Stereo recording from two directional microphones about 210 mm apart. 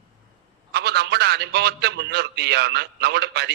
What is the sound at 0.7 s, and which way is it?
A man's voice, 50° right (ahead or behind).